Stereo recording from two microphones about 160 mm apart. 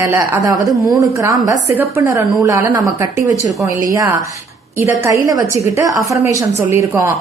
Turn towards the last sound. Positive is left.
turn(degrees=-15)  # may be behind; listen again after turning